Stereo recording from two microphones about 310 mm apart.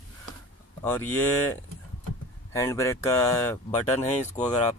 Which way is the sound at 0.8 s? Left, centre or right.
Centre.